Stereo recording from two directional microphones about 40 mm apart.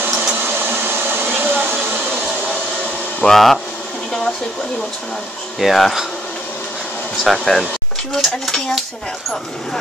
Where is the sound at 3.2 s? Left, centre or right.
Left.